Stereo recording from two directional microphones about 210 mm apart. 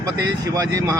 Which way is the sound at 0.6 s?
15° right (ahead or behind).